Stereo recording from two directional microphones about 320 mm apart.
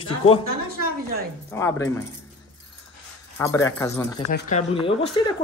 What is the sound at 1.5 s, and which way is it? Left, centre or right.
Speech, centre.